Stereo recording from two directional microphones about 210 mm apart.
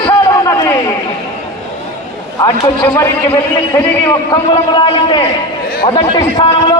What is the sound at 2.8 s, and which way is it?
A man's voice, 10° left (ahead or behind).